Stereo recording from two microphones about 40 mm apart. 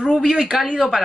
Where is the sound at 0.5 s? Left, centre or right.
Centre.